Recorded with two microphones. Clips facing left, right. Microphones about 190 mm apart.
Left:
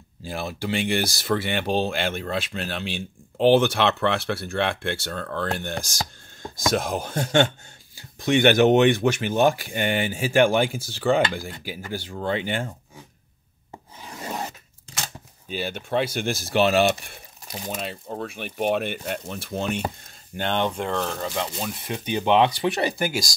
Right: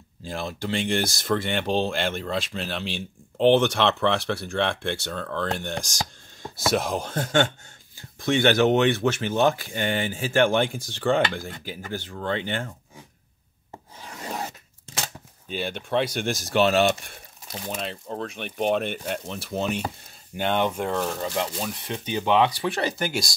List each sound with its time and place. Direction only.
0.2 s speech: 5° left (ahead or behind)
13.9 s filing: 10° left (ahead or behind)
15.4 s speech: 5° left (ahead or behind)
21.5 s speech: 5° left (ahead or behind)